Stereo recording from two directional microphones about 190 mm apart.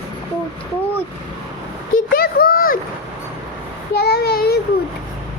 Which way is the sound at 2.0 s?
50° left (ahead or behind).